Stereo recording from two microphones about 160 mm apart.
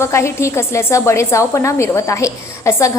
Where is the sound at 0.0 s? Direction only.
15° left (ahead or behind).